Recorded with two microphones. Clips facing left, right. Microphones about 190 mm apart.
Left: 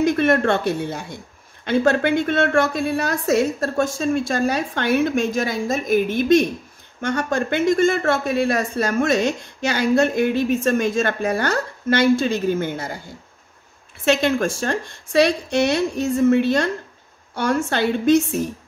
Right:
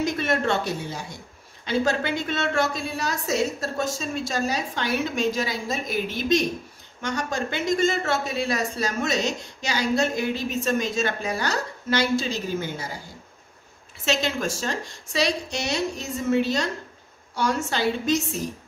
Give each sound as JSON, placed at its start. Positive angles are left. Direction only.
{"t": 0.0, "sound": "speech", "side_deg": 55}
{"t": 14.0, "sound": "speech", "side_deg": 55}